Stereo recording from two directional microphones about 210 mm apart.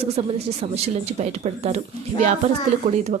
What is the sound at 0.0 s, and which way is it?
Speech, 30° right (ahead or behind).